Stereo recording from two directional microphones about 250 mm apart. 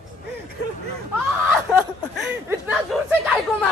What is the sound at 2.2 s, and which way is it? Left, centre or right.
Speech, centre.